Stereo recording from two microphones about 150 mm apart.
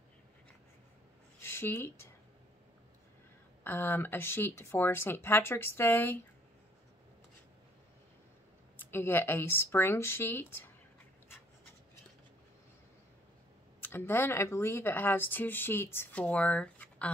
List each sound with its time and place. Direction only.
1.4 s speech: 15° left (ahead or behind)
3.6 s speech: 15° left (ahead or behind)
8.7 s speech: 15° left (ahead or behind)
13.7 s speech: 15° left (ahead or behind)